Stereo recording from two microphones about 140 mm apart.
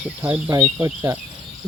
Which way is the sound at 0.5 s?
30° right (ahead or behind).